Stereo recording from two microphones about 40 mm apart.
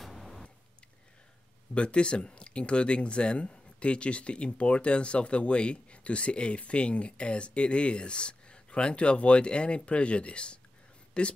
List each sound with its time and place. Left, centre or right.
0.0 s vehicle: centre
1.7 s speech: left